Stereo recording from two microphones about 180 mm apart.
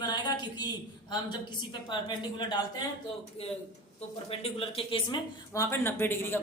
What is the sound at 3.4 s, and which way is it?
Speech, 35° left (ahead or behind).